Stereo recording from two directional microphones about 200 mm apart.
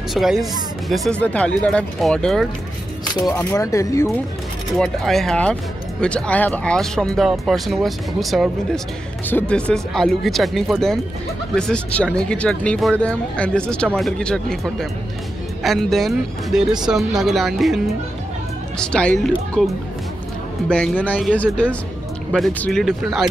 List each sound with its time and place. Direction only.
0.1 s speech: centre (ahead or behind)
3.2 s speech: 15° left (ahead or behind)
4.7 s speech: centre (ahead or behind)
21.0 s speech: 5° left (ahead or behind)